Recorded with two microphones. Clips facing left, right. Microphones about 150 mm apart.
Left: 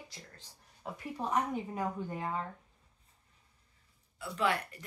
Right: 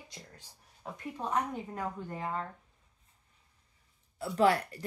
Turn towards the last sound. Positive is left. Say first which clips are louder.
# right 6 dB
turn(degrees=-35)  # may be behind; listen again after turning